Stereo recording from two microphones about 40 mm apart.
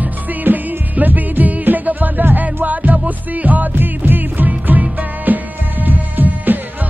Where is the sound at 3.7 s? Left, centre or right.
Right.